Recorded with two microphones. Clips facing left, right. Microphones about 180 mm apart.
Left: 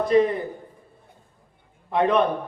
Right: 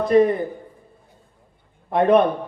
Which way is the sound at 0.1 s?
50° right (ahead or behind).